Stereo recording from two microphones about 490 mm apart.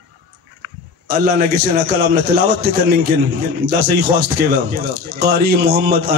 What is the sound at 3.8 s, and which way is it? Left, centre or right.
Speech, right.